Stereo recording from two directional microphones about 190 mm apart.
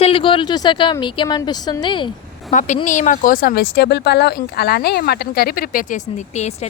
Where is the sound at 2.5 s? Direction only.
40° left (ahead or behind).